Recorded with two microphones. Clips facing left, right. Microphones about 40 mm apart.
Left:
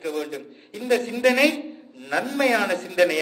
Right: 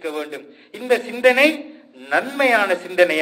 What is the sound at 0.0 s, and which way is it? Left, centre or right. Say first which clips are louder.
A man's voice: right 2 dB; right.